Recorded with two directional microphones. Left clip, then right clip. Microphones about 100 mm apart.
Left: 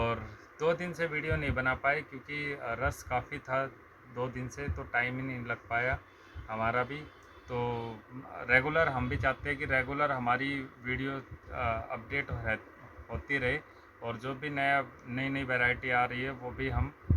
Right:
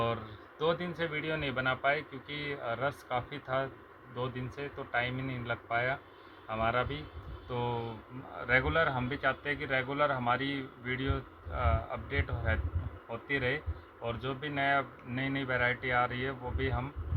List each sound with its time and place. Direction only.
0.6 s speech: 20° left (ahead or behind)